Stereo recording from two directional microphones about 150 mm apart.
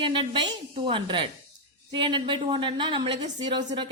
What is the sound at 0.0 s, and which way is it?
A woman's voice, 35° right (ahead or behind).